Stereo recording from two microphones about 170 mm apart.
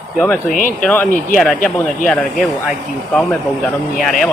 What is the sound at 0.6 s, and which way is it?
Speech, 50° left (ahead or behind).